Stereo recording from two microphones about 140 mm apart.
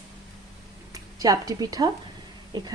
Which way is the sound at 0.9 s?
25° right (ahead or behind).